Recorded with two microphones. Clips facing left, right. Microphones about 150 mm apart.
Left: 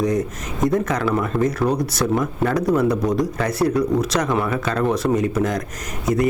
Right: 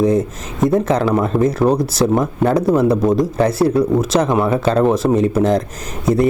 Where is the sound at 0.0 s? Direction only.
25° right (ahead or behind).